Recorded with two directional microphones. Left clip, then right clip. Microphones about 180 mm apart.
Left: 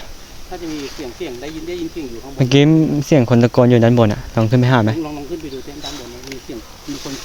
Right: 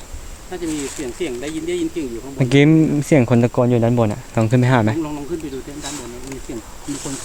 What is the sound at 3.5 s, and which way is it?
Speech, 40° left (ahead or behind).